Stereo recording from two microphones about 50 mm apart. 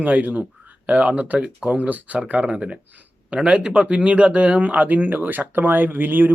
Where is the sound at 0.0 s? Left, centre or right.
Right.